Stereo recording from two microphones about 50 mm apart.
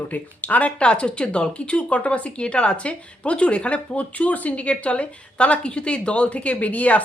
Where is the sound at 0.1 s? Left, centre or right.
Left.